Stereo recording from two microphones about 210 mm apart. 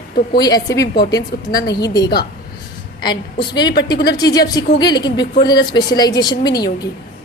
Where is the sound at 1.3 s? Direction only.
50° left (ahead or behind).